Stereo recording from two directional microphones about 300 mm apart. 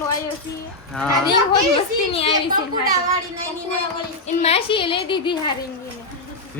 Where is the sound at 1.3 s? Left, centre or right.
Centre.